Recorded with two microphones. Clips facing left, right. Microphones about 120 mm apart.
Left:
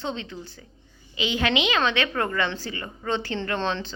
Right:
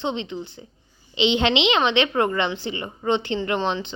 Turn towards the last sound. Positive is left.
turn(degrees=-15)  # may be behind; listen again after turning